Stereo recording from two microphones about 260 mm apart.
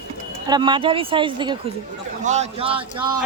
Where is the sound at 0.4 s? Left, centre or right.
Centre.